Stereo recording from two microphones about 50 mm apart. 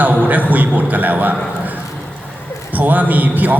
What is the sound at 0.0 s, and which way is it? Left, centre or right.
A man's voice, right.